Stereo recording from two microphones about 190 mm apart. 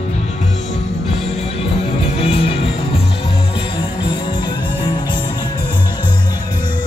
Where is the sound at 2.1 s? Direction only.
30° left (ahead or behind).